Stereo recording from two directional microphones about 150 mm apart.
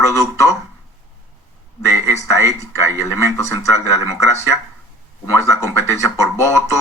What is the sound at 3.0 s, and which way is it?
Speech, 20° left (ahead or behind).